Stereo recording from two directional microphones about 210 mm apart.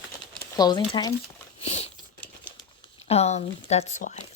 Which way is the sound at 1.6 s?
30° left (ahead or behind).